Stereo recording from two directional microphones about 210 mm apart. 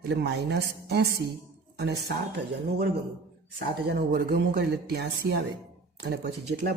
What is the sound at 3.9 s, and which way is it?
A woman's voice, 50° right (ahead or behind).